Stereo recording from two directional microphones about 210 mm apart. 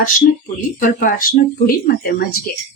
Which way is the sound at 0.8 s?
40° left (ahead or behind).